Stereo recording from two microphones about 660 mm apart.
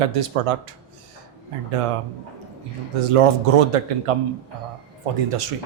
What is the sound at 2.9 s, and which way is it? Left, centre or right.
A man's voice, right.